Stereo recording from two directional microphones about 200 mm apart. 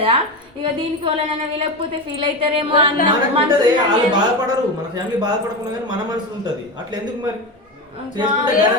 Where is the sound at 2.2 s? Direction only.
25° right (ahead or behind).